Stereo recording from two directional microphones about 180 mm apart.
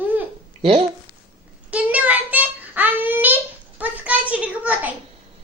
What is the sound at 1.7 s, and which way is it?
Child singing, 10° right (ahead or behind).